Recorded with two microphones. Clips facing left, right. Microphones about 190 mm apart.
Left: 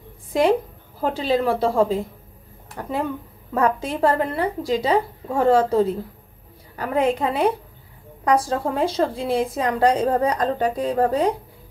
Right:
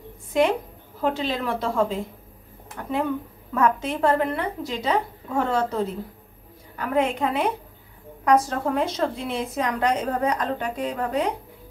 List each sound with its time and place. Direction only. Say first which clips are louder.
0.3 s a woman's voice: left 3 dB; 35° left (ahead or behind)